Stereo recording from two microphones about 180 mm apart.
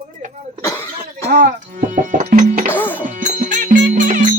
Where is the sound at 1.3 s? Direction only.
50° right (ahead or behind).